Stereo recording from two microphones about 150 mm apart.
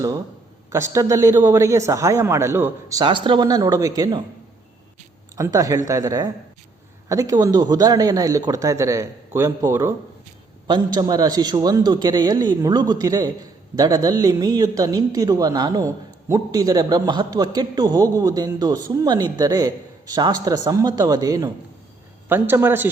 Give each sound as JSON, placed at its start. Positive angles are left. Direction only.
{"t": 0.7, "sound": "a man's voice", "side_deg": -20}
{"t": 3.0, "sound": "a man's voice", "side_deg": -35}
{"t": 5.4, "sound": "a man's voice", "side_deg": -25}
{"t": 22.3, "sound": "a man's voice", "side_deg": -15}